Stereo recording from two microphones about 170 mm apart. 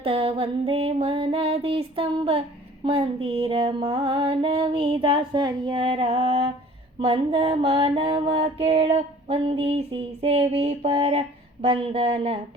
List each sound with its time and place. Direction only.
0.0 s mantra: 30° right (ahead or behind)